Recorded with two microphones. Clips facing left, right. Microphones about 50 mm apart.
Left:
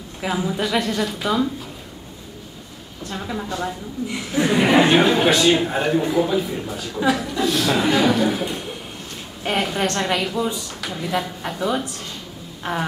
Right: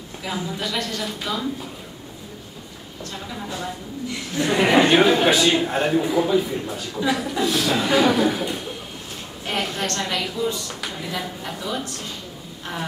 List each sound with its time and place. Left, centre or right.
0.2 s a woman's voice: centre
3.1 s a woman's voice: centre
3.4 s a man's voice: centre
4.1 s a woman's voice: centre
4.5 s a man's voice: centre
9.4 s a woman's voice: centre
10.8 s a woman's voice: centre